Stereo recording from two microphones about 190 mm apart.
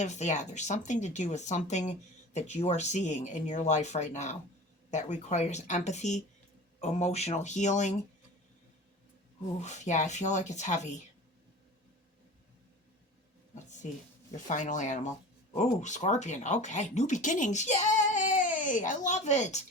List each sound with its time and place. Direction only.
0.0 s speech: 40° left (ahead or behind)
9.6 s speech: 40° left (ahead or behind)
14.3 s speech: 40° left (ahead or behind)